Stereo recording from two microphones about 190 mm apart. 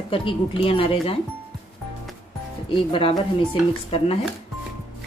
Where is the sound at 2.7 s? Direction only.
25° left (ahead or behind).